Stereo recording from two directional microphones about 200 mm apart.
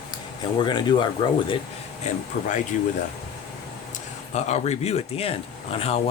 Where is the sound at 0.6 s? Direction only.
20° left (ahead or behind).